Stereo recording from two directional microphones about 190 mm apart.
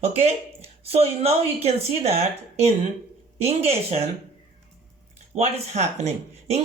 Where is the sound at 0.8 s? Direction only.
35° right (ahead or behind).